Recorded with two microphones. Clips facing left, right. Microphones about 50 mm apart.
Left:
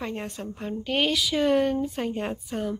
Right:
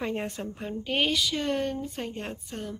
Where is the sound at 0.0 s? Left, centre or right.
Centre.